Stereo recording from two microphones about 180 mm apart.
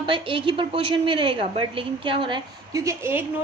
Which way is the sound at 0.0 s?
30° right (ahead or behind).